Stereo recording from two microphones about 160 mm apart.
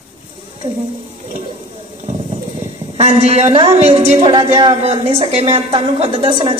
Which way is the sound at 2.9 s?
40° right (ahead or behind).